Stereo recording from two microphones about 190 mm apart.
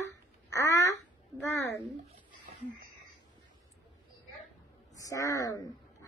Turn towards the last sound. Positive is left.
turn(degrees=20)  # may be behind; listen again after turning